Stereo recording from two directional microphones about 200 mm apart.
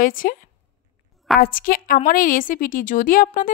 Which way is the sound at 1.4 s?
45° left (ahead or behind).